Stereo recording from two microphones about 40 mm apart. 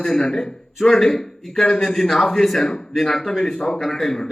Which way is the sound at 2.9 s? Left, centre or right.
Centre.